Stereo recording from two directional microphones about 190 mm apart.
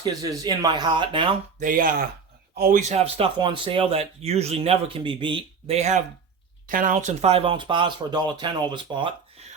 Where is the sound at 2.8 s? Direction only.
35° right (ahead or behind).